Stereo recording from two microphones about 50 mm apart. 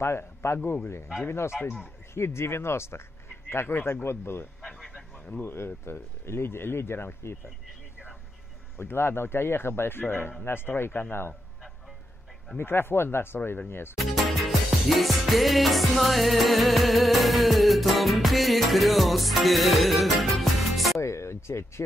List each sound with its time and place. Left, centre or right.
0.0 s a man's voice: left
4.6 s a sound: centre
5.9 s speech: left
8.7 s a man's voice: left
12.5 s a man's voice: left
13.9 s music: centre
21.0 s speech: left